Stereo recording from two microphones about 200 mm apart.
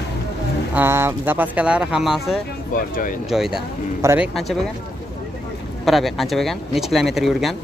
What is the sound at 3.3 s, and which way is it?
Speech, centre (ahead or behind).